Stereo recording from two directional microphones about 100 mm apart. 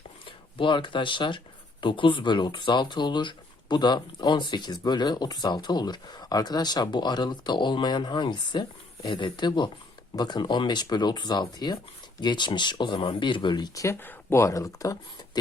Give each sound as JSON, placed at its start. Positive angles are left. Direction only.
{"t": 0.3, "sound": "speech", "side_deg": 55}
{"t": 14.0, "sound": "speech", "side_deg": 20}